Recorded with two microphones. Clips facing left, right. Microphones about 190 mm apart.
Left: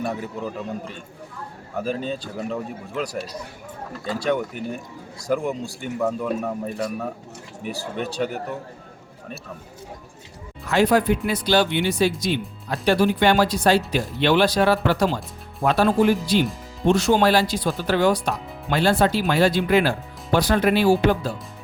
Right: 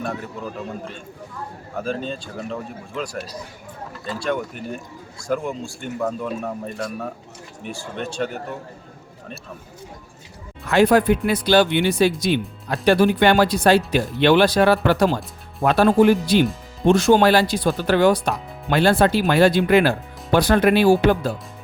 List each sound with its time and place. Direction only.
1.8 s speech: 10° left (ahead or behind)
4.2 s speech: 15° left (ahead or behind)
7.9 s speech: 10° left (ahead or behind)
10.7 s speech: 55° right (ahead or behind)